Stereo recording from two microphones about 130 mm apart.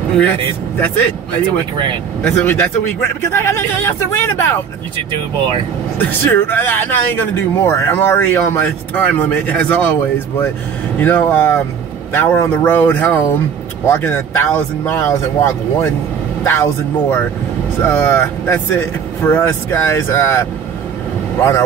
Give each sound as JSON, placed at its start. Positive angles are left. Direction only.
{"t": 0.2, "sound": "speech", "side_deg": 15}
{"t": 2.2, "sound": "speech", "side_deg": 15}
{"t": 5.9, "sound": "speech", "side_deg": 15}
{"t": 11.0, "sound": "speech", "side_deg": 15}